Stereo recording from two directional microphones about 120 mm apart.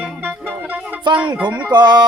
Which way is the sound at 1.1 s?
40° right (ahead or behind).